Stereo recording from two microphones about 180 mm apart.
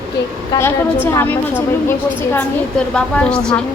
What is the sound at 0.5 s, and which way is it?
A woman's voice, 20° left (ahead or behind).